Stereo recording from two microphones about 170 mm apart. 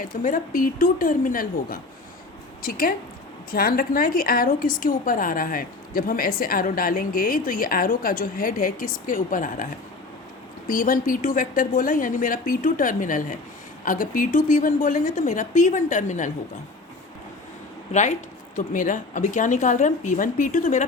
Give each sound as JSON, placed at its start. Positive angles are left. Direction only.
{"t": 0.0, "sound": "a woman's voice", "side_deg": 50}
{"t": 10.7, "sound": "speech", "side_deg": 55}
{"t": 18.5, "sound": "speech", "side_deg": 50}